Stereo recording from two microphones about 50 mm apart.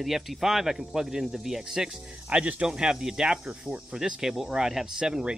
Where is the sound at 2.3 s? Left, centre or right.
Right.